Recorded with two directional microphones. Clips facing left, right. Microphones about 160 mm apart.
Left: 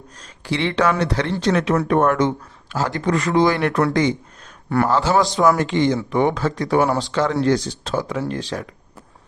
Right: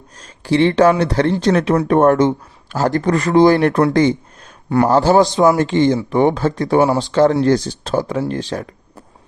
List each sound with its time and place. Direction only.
0.2 s speech: 45° right (ahead or behind)
2.7 s speech: 45° right (ahead or behind)
4.9 s speech: 40° right (ahead or behind)
5.1 s speech: 20° right (ahead or behind)
7.1 s speech: 40° right (ahead or behind)